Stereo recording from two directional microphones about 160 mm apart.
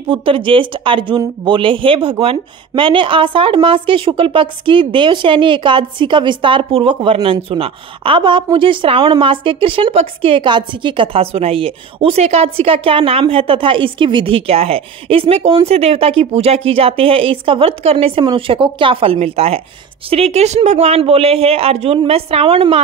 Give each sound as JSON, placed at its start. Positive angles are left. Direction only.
{"t": 0.1, "sound": "a woman's voice", "side_deg": -35}